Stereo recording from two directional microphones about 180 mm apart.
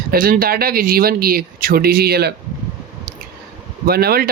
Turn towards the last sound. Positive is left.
turn(degrees=-55)  # may be behind; listen again after turning